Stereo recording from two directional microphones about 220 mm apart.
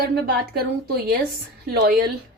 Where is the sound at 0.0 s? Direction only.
45° right (ahead or behind).